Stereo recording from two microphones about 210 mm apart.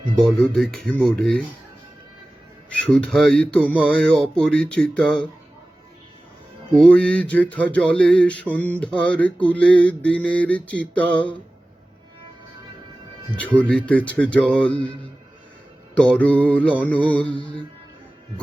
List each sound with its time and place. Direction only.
0.2 s mantra: centre (ahead or behind)
2.8 s mantra: centre (ahead or behind)
6.7 s mantra: 5° left (ahead or behind)
13.3 s mantra: 5° left (ahead or behind)
16.0 s mantra: 5° left (ahead or behind)